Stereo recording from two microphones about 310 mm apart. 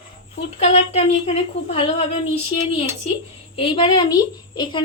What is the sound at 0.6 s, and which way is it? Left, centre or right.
Speech, left.